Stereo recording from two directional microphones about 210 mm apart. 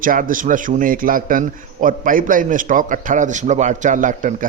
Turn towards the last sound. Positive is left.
turn(degrees=-35)  # may be behind; listen again after turning